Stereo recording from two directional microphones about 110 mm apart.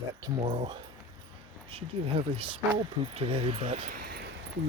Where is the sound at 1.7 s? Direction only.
60° right (ahead or behind).